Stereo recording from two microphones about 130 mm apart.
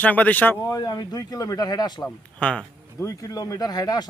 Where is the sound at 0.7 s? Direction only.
30° left (ahead or behind).